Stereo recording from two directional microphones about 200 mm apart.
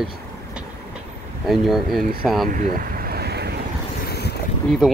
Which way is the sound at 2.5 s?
45° right (ahead or behind).